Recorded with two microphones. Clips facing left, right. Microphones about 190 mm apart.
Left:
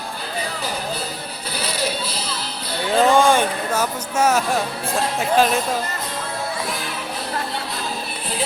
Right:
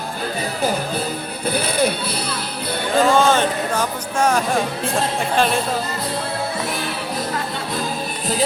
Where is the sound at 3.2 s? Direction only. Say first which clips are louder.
Even; 10° left (ahead or behind).